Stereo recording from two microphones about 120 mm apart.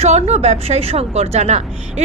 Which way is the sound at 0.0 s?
65° right (ahead or behind).